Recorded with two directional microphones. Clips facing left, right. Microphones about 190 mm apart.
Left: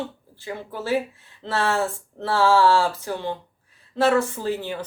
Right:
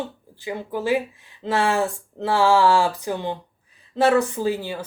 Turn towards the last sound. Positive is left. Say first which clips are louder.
# right 2 dB
turn(degrees=-10)  # may be behind; listen again after turning